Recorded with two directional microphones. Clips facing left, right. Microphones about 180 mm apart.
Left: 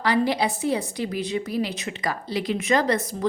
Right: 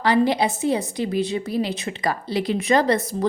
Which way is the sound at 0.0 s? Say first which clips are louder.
Right 3 dB; 25° right (ahead or behind).